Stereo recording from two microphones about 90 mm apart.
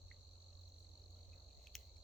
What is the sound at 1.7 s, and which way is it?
Cricket, 5° left (ahead or behind).